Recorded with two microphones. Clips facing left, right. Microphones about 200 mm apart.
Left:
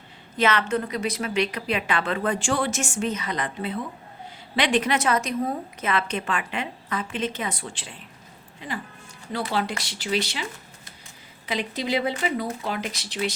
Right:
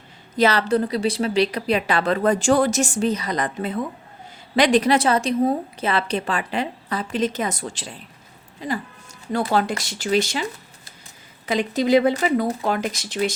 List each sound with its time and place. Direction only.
0.3 s a woman's voice: 35° right (ahead or behind)
11.4 s speech: 45° right (ahead or behind)